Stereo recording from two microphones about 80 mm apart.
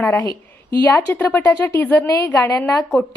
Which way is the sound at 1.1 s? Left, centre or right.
Left.